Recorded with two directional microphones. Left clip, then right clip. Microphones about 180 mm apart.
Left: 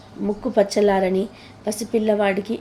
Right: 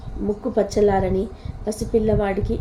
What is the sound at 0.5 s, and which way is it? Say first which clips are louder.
A woman's voice: left 1 dB; 15° left (ahead or behind).